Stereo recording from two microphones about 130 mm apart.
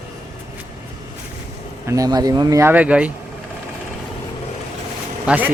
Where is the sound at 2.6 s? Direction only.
10° right (ahead or behind).